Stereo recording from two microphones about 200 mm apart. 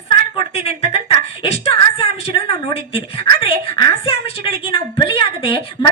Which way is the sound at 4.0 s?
30° left (ahead or behind).